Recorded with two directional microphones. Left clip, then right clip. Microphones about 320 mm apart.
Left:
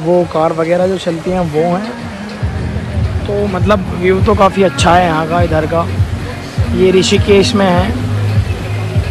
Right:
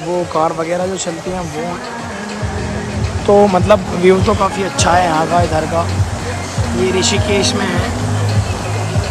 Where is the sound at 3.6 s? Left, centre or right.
Centre.